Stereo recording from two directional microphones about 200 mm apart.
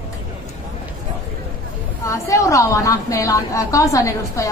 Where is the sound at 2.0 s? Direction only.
15° left (ahead or behind).